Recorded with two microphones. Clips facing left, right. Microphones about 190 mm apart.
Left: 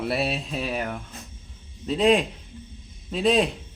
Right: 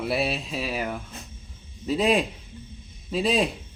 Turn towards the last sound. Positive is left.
turn(degrees=0)  # may be behind; listen again after turning